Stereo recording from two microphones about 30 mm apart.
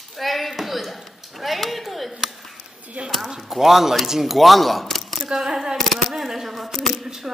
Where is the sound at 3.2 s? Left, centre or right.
Centre.